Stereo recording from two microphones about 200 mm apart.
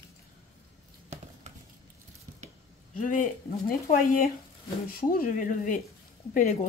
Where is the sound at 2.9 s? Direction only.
45° left (ahead or behind).